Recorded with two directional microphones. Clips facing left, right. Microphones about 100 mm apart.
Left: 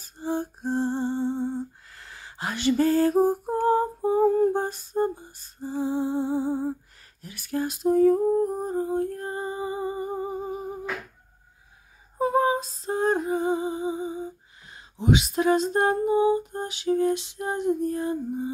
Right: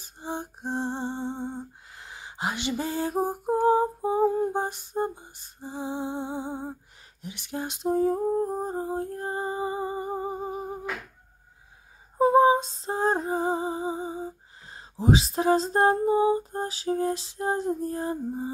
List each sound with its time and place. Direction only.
0.0 s humming: 20° right (ahead or behind)
12.2 s music: 30° right (ahead or behind)